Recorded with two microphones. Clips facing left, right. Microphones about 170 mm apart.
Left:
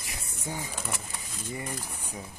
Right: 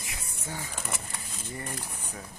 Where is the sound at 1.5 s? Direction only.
10° left (ahead or behind).